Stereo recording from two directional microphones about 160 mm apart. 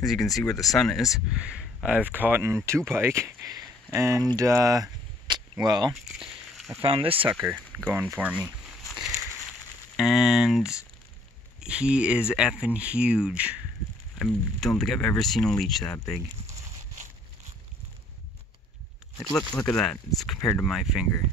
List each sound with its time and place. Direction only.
0.0 s speech: centre (ahead or behind); by 3.4 s 15° right (ahead or behind)
3.4 s a sound: 20° right (ahead or behind)
4.4 s speech: 20° right (ahead or behind)
5.2 s a sound: 25° right (ahead or behind)
6.0 s a sound: 5° right (ahead or behind)
6.8 s speech: 35° right (ahead or behind)
7.2 s speech: 10° right (ahead or behind)
8.9 s a sound: 5° right (ahead or behind)
9.9 s speech: centre (ahead or behind)
14.1 s speech: 5° left (ahead or behind)
19.3 s speech: 10° left (ahead or behind)
20.3 s speech: 15° left (ahead or behind)
20.6 s speech: centre (ahead or behind)